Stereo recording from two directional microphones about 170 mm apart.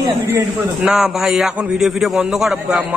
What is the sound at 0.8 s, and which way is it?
A man's voice, 5° right (ahead or behind).